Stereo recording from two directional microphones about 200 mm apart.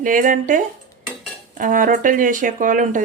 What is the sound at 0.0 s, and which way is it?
Speech, 40° right (ahead or behind).